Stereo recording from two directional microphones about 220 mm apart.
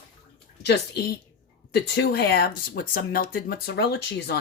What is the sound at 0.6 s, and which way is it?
Speech, 50° left (ahead or behind).